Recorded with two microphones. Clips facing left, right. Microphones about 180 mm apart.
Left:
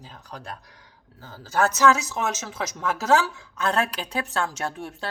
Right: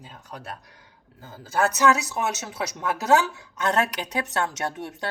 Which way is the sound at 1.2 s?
20° right (ahead or behind).